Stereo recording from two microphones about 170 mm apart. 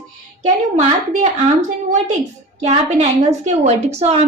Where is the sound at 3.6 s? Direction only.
40° right (ahead or behind).